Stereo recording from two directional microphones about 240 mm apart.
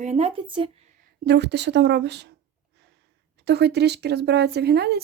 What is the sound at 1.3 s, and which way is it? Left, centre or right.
Speech, right.